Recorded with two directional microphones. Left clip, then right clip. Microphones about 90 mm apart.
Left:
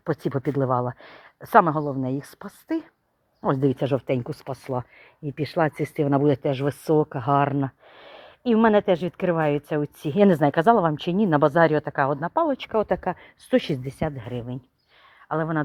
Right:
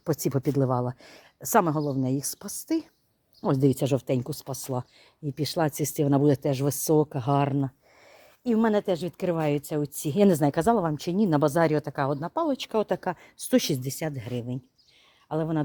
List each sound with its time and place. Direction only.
0.1 s speech: 70° right (ahead or behind)
0.3 s speech: 45° right (ahead or behind)
1.8 s speech: 25° right (ahead or behind)
2.0 s a woman's voice: 65° right (ahead or behind); by 4.2 s 35° right (ahead or behind)
4.3 s speech: 25° right (ahead or behind); by 7.5 s 40° right (ahead or behind)
8.5 s speech: 5° right (ahead or behind)
9.1 s speech: 20° right (ahead or behind)
11.2 s speech: 30° right (ahead or behind)